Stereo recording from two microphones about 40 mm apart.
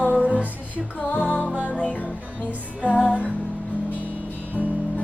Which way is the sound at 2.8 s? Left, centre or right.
Left.